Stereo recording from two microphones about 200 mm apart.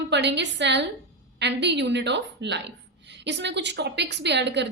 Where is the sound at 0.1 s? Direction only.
60° right (ahead or behind).